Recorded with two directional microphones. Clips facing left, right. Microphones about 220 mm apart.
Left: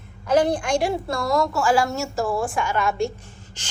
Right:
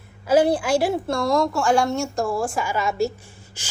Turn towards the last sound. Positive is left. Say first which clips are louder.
# left 1 dB
turn(degrees=-5)  # may be behind; listen again after turning